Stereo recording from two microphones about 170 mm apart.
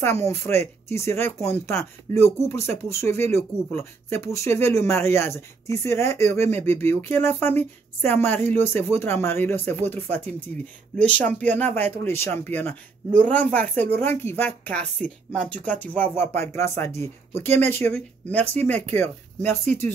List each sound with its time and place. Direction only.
0.0 s speech: 15° left (ahead or behind)
11.0 s speech: 10° left (ahead or behind)